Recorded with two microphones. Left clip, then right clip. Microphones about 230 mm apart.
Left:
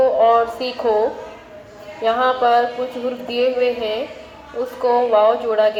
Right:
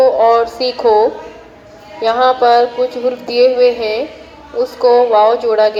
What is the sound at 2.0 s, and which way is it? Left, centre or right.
A woman's voice, right.